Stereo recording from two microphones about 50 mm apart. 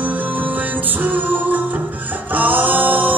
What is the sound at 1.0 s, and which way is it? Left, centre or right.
Music, right.